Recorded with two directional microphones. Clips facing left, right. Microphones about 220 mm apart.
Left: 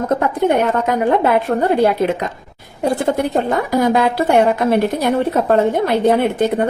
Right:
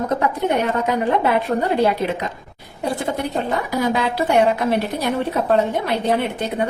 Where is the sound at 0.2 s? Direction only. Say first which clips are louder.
Left 4 dB; 55° left (ahead or behind).